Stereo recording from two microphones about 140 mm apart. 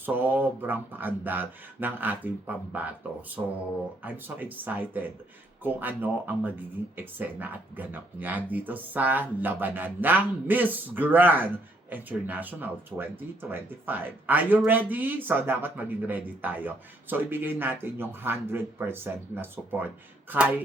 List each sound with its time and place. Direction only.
0.0 s speech: 15° right (ahead or behind)